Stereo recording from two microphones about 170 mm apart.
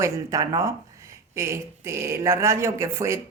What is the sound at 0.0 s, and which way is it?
Speech, 20° right (ahead or behind).